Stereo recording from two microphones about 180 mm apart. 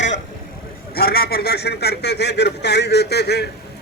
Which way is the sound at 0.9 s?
60° left (ahead or behind).